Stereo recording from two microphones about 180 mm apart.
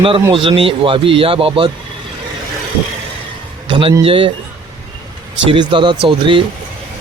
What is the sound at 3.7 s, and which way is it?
Speech, 30° right (ahead or behind).